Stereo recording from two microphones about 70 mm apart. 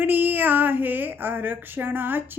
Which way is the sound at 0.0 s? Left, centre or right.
Right.